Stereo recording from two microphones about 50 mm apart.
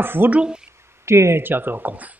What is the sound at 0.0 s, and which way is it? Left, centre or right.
Speech, right.